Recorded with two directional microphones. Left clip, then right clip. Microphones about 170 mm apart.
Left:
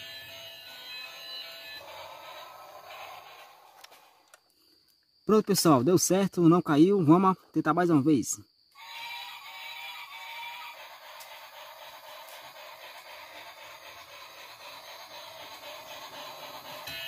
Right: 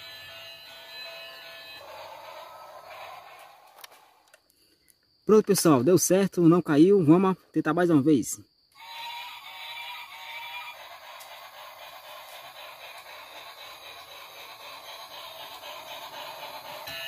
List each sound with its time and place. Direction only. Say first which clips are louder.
2.0 s music: right 2 dB; 55° left (ahead or behind)
5.2 s speech: right 4 dB; centre (ahead or behind)
8.8 s synthetic singing: right 2 dB; centre (ahead or behind)
11.2 s a sound: right 2 dB; 10° right (ahead or behind)